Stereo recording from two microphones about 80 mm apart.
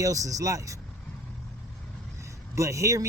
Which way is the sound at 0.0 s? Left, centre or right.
Right.